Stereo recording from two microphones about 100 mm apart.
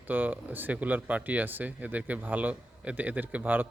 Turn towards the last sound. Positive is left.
turn(degrees=-20)  # may be behind; listen again after turning